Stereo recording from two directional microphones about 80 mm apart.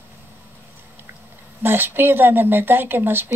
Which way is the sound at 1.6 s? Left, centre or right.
Right.